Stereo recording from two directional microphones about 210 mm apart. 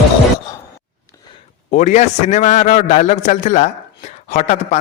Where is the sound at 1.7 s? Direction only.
35° left (ahead or behind).